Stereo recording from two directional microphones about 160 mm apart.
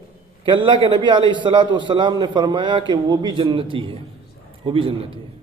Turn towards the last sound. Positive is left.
turn(degrees=-35)  # may be behind; listen again after turning